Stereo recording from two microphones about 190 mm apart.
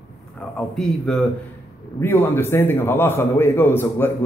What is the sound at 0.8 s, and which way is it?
A man's voice, centre (ahead or behind).